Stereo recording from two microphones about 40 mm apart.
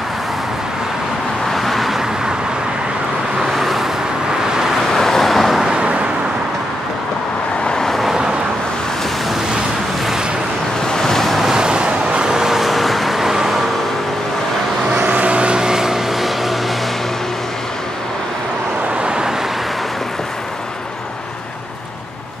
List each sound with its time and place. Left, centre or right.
1.5 s vehicle: centre
3.5 s vehicle: centre
4.9 s vehicle: centre
5.6 s vehicle: right
7.6 s vehicle: centre
8.1 s vehicle: centre
10.9 s waves: centre
11.5 s vehicle: right
15.0 s vehicle: right; by 16.5 s centre
18.9 s vehicle: right